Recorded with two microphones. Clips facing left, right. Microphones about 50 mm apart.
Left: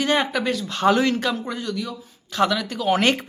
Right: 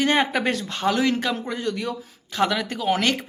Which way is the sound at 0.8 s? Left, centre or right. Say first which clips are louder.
Left 5 dB; left.